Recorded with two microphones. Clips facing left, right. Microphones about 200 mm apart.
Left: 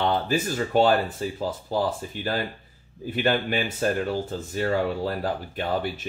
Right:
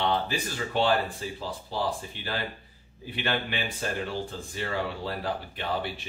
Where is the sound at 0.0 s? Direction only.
45° left (ahead or behind).